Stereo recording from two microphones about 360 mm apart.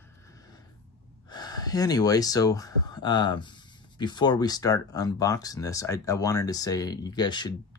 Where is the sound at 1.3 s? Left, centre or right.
Centre.